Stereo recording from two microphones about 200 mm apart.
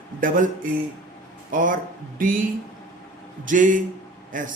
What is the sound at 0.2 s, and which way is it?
Speech, 45° right (ahead or behind).